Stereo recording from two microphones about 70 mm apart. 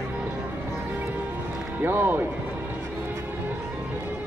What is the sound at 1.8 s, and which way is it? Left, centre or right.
Speech, right.